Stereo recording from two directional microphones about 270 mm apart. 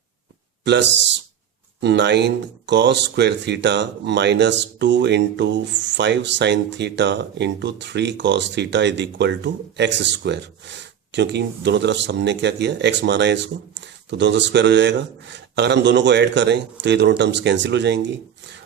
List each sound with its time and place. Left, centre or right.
0.6 s speech: right